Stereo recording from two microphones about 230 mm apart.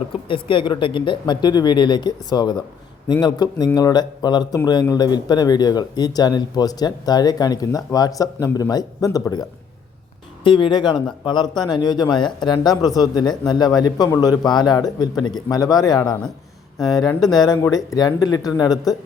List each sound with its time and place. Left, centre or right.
0.3 s a man's voice: left